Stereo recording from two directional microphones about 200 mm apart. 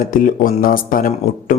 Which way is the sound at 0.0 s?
45° left (ahead or behind).